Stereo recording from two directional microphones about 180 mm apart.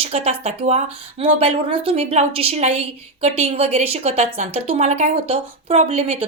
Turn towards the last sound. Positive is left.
turn(degrees=-35)  # may be behind; listen again after turning